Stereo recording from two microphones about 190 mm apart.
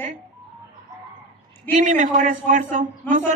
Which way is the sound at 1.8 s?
40° right (ahead or behind).